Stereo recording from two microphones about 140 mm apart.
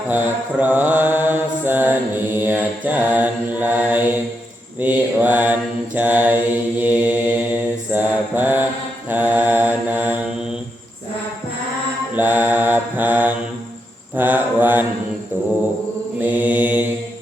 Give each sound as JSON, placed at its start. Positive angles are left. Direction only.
{"t": 0.1, "sound": "mantra", "side_deg": -15}
{"t": 12.1, "sound": "mantra", "side_deg": -15}
{"t": 16.2, "sound": "mantra", "side_deg": -10}